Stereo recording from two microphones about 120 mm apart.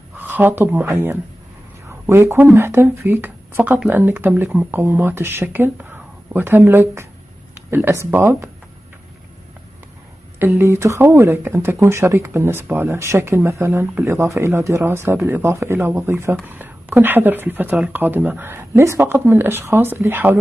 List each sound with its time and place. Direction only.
0.2 s speech: 15° right (ahead or behind)
10.4 s speech: 20° right (ahead or behind)